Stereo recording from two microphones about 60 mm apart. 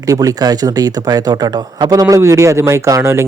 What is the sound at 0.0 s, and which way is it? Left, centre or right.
Speech, right.